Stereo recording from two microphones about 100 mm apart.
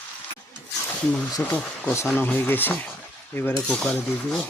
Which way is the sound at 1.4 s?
15° left (ahead or behind).